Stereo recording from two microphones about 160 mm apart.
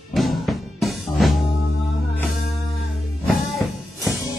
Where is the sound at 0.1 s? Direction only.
Centre (ahead or behind).